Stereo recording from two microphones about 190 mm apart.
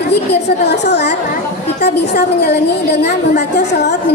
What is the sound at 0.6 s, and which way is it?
A woman's voice, 65° left (ahead or behind).